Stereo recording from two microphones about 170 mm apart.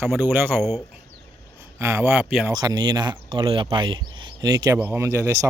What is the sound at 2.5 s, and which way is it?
Speech, 20° right (ahead or behind).